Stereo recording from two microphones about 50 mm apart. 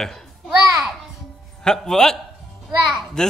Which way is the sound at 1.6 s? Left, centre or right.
Centre.